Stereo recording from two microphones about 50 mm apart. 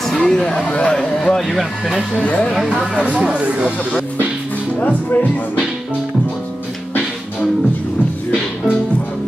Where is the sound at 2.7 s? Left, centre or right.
Right.